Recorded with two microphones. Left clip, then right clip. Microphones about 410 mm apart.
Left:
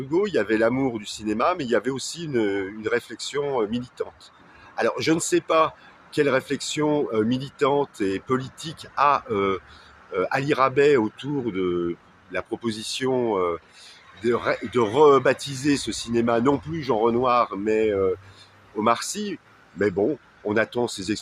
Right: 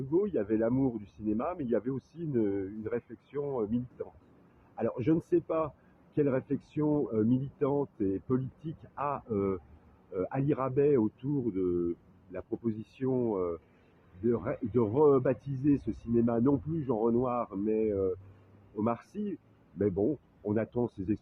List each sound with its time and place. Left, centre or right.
0.1 s speech: right
4.8 s speech: right